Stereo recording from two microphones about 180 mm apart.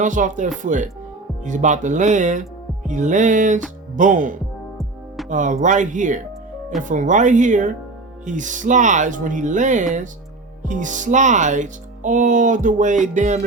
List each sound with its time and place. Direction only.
0.0 s speech: 45° right (ahead or behind)